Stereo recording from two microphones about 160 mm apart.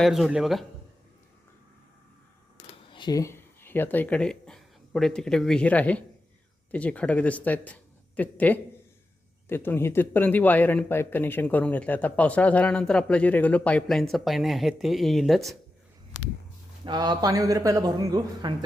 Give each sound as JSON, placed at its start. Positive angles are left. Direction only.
{"t": 0.0, "sound": "speech", "side_deg": 0}
{"t": 2.9, "sound": "speech", "side_deg": 25}
{"t": 16.8, "sound": "a man's voice", "side_deg": -25}